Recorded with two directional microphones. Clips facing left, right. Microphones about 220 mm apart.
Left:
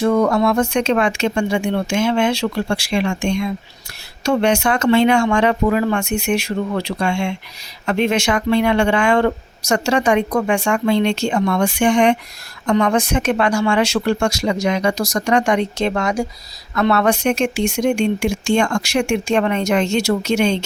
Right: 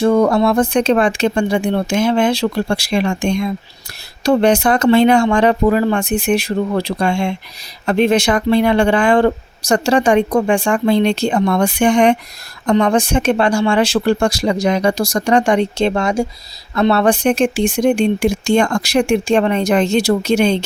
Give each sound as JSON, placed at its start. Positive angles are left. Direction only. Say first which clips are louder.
{"t": 0.0, "sound": "speech", "louder": "right 3 dB", "side_deg": -30}